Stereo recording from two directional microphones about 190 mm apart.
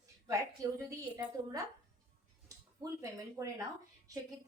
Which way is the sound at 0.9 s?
15° right (ahead or behind).